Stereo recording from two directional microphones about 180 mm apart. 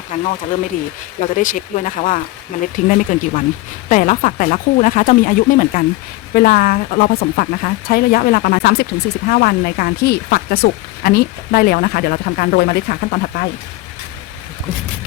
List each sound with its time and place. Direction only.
0.1 s speech: 45° left (ahead or behind); by 13.1 s 60° left (ahead or behind)